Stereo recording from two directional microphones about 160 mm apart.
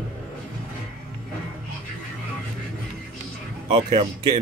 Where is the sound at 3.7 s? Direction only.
30° right (ahead or behind).